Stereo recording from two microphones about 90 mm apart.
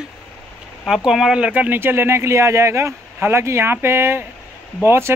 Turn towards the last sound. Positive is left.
turn(degrees=-30)  # may be behind; listen again after turning